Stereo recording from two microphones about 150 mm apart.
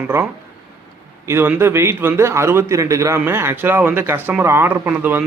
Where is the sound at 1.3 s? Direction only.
15° right (ahead or behind).